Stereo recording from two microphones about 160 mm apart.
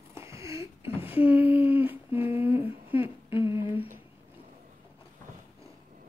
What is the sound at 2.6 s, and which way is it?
Humming, 35° left (ahead or behind).